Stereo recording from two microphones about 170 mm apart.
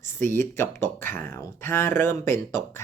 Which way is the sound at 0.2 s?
15° left (ahead or behind).